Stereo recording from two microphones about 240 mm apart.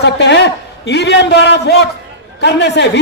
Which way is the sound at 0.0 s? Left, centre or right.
Left.